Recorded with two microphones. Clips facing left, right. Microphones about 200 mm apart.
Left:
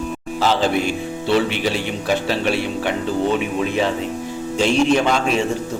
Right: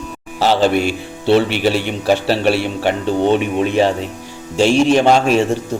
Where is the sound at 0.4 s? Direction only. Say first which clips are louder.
Right 4 dB; 70° right (ahead or behind).